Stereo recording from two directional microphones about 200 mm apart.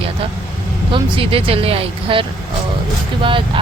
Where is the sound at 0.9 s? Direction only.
25° right (ahead or behind).